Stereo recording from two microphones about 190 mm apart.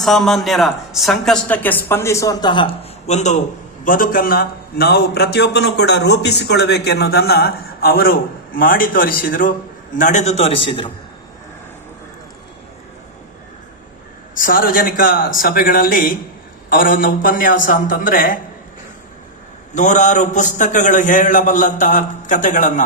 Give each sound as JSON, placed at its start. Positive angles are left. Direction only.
{"t": 0.0, "sound": "a man's voice", "side_deg": 0}
{"t": 14.3, "sound": "a man's voice", "side_deg": 45}
{"t": 19.7, "sound": "a man's voice", "side_deg": 40}